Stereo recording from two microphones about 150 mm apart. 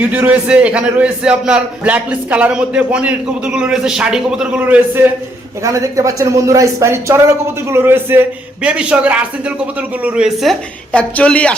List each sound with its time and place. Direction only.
0.1 s a man's voice: 10° right (ahead or behind)
5.6 s a man's voice: 20° right (ahead or behind); by 11.5 s 10° left (ahead or behind)